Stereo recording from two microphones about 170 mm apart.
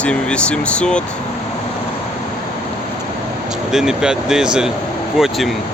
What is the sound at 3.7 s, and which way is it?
Speech, 5° right (ahead or behind).